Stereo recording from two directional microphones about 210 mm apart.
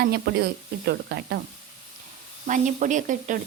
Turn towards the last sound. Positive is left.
turn(degrees=-35)  # may be behind; listen again after turning